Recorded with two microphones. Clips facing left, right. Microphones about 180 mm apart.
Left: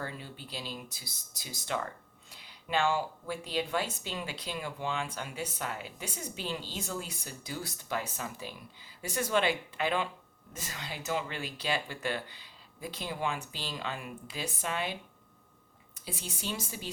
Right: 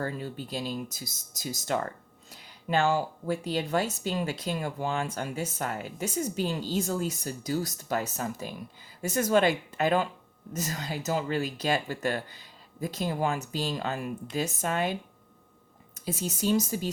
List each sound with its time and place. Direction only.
0.0 s speech: 45° right (ahead or behind)
16.0 s speech: 45° right (ahead or behind)